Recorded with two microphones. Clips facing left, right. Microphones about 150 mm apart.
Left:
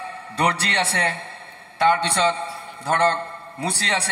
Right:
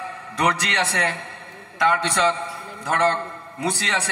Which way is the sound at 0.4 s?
30° left (ahead or behind).